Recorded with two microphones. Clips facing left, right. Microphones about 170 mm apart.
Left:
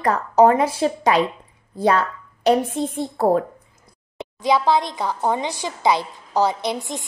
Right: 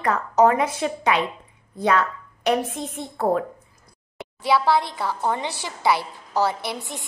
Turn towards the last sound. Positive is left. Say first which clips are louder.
# left 5 dB
turn(degrees=20)  # may be behind; listen again after turning